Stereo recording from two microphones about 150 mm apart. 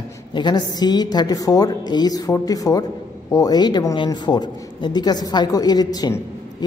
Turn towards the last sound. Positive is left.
turn(degrees=25)  # may be behind; listen again after turning